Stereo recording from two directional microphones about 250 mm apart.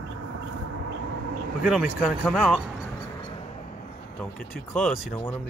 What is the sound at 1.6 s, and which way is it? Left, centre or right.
Speech, centre.